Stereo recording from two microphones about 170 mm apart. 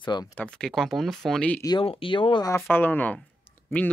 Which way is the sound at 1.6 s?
30° left (ahead or behind).